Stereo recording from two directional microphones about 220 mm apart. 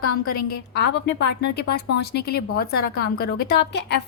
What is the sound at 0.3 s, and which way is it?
A woman's voice, 50° left (ahead or behind).